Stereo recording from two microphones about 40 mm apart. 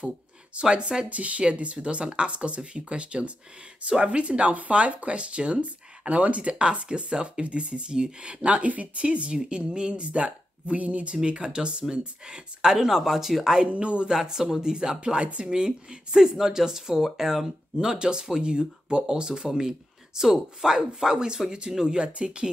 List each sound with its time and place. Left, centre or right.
0.6 s speech: right
1.1 s speech: right
11.2 s speech: right
12.7 s speech: centre
13.7 s speech: right
14.0 s speech: centre